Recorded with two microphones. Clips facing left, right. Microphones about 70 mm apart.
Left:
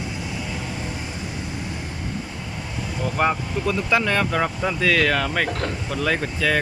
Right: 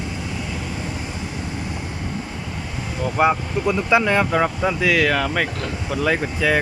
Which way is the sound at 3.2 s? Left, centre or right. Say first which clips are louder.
Right 4 dB; centre.